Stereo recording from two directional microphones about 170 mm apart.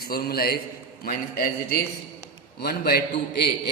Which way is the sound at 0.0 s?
65° left (ahead or behind).